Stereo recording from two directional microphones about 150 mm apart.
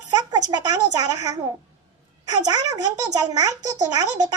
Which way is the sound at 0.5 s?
25° right (ahead or behind).